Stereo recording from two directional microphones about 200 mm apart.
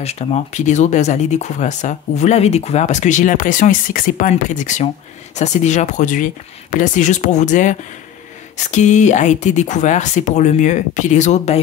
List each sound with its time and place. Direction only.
0.0 s speech: 30° left (ahead or behind)